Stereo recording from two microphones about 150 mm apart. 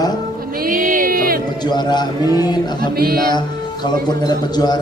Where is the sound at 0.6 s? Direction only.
70° right (ahead or behind).